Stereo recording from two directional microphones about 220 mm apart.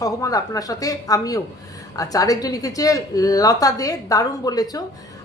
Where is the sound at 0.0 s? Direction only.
15° left (ahead or behind).